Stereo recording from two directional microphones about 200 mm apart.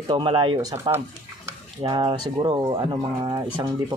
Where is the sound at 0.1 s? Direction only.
25° right (ahead or behind).